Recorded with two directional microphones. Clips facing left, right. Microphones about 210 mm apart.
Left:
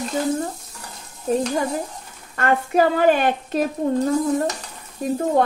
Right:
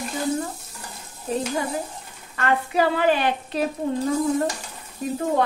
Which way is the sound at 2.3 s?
45° left (ahead or behind).